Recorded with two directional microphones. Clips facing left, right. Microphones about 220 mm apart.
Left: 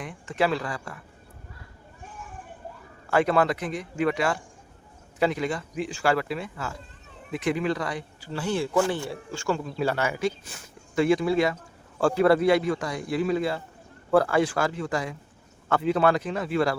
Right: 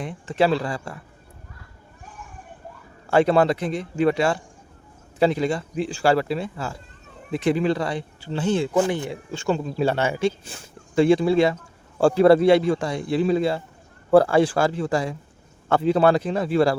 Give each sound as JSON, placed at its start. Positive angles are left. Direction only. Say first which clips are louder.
{"t": 0.0, "sound": "speech", "louder": "right 5 dB", "side_deg": -30}
{"t": 3.1, "sound": "speech", "louder": "right 5 dB", "side_deg": -30}